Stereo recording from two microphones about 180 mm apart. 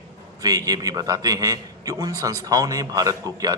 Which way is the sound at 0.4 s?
20° right (ahead or behind).